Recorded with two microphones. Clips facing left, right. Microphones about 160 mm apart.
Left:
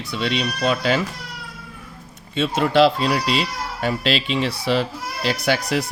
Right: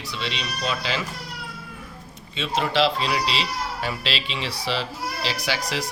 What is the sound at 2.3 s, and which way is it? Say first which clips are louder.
Speech: left 6 dB; 50° left (ahead or behind).